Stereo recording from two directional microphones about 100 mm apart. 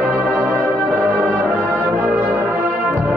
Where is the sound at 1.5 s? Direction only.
10° left (ahead or behind).